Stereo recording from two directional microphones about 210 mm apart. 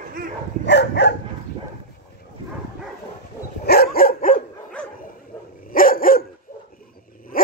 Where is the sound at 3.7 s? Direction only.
45° left (ahead or behind).